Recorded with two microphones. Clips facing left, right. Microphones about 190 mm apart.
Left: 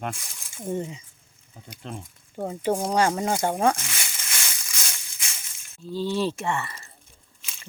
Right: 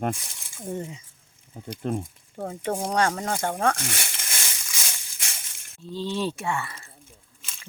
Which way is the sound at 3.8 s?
55° right (ahead or behind).